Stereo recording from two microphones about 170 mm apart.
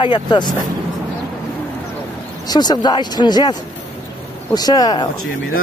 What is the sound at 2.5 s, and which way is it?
Speech, 25° left (ahead or behind).